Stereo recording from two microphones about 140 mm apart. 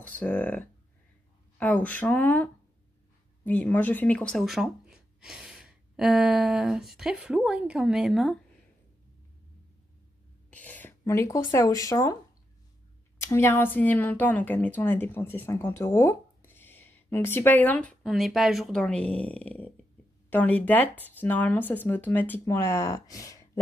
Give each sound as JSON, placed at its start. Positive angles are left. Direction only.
{"t": 0.2, "sound": "a woman's voice", "side_deg": 10}
{"t": 10.5, "sound": "speech", "side_deg": 10}
{"t": 13.2, "sound": "a woman's voice", "side_deg": 15}